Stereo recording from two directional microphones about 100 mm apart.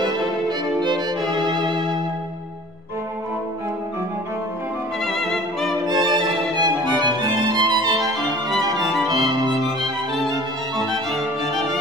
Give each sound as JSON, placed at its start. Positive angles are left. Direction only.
{"t": 0.0, "sound": "violin", "side_deg": -45}
{"t": 5.0, "sound": "music", "side_deg": 5}
{"t": 6.5, "sound": "music", "side_deg": -45}